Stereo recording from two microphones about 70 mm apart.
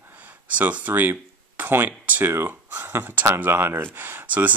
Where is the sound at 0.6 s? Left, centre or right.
Right.